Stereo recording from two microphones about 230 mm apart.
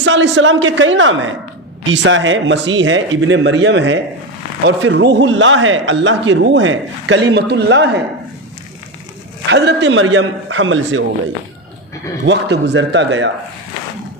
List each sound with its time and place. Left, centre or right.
0.0 s a man's voice: right
9.5 s a man's voice: right
12.2 s a man's voice: right